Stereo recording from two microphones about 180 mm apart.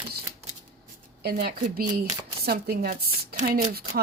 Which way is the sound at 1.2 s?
60° right (ahead or behind).